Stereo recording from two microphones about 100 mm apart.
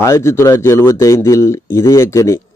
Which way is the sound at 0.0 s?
30° left (ahead or behind).